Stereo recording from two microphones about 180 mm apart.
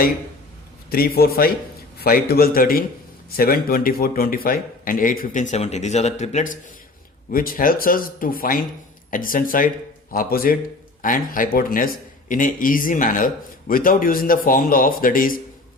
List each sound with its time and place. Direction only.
0.9 s a man's voice: 55° left (ahead or behind)